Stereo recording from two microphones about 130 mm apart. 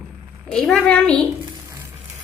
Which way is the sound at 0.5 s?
5° left (ahead or behind).